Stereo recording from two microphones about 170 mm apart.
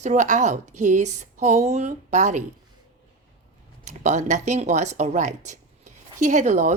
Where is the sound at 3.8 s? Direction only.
45° right (ahead or behind).